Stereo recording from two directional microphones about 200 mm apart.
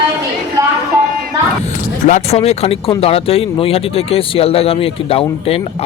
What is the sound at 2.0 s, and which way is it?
A man's voice, 35° left (ahead or behind).